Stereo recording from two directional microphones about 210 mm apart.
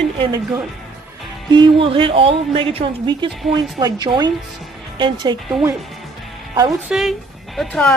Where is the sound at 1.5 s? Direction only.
25° right (ahead or behind).